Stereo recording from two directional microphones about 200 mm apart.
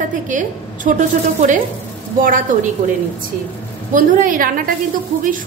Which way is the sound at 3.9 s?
40° right (ahead or behind).